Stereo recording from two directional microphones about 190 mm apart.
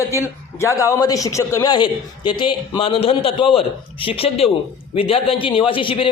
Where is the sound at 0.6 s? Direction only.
15° left (ahead or behind).